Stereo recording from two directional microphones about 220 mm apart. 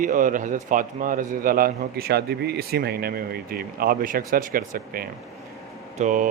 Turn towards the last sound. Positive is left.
turn(degrees=-35)  # may be behind; listen again after turning